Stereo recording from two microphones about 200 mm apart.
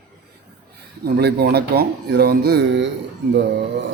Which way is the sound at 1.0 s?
50° right (ahead or behind).